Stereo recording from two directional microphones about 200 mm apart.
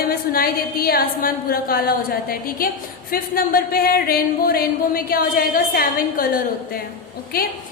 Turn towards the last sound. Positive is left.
turn(degrees=50)  # may be behind; listen again after turning